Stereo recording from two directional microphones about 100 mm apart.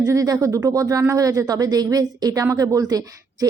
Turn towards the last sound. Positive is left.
turn(degrees=-40)  # may be behind; listen again after turning